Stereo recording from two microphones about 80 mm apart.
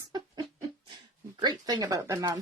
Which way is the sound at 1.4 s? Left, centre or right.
Right.